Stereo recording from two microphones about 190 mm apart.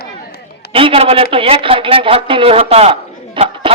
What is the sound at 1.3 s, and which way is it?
A man's voice, 25° right (ahead or behind).